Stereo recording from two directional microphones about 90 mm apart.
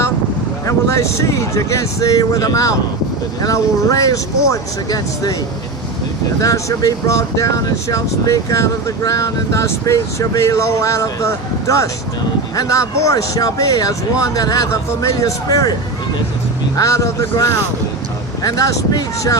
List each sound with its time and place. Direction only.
0.7 s speech: 35° left (ahead or behind)
6.4 s speech: 40° left (ahead or behind)
16.7 s speech: 35° left (ahead or behind)